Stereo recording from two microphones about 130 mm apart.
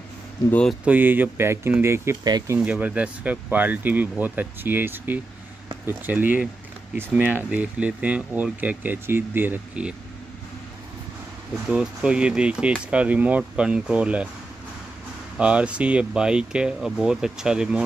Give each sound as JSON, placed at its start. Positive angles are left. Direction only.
{"t": 0.5, "sound": "speech", "side_deg": 10}
{"t": 0.8, "sound": "speech", "side_deg": -15}
{"t": 2.2, "sound": "speech", "side_deg": -30}
{"t": 2.5, "sound": "speech", "side_deg": -10}
{"t": 11.7, "sound": "speech", "side_deg": -5}
{"t": 15.3, "sound": "speech", "side_deg": -10}